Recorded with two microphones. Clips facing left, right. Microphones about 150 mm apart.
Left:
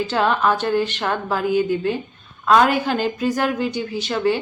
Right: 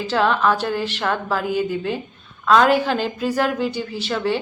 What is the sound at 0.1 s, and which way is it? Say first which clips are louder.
A woman's voice: right 3 dB; 5° left (ahead or behind).